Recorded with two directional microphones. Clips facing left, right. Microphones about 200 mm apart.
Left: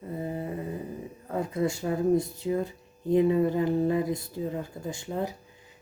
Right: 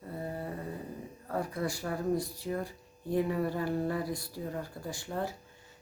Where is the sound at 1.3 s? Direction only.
20° left (ahead or behind).